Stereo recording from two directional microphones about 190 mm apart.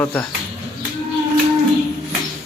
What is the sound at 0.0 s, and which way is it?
Speech, 10° left (ahead or behind).